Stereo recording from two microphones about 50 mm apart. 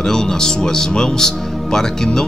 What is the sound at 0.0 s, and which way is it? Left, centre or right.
A man's voice, centre.